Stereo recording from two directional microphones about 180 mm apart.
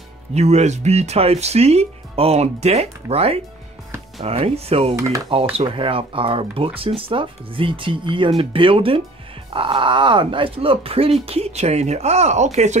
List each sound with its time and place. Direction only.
0.3 s speech: 35° right (ahead or behind)